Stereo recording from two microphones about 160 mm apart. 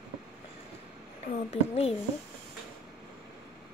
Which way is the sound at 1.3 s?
40° left (ahead or behind).